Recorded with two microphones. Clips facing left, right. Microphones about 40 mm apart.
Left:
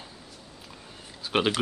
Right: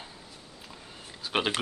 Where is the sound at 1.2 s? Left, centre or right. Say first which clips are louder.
Left 3 dB; centre.